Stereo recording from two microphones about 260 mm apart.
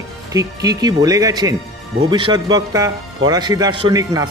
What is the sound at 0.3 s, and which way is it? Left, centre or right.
A man's voice, centre.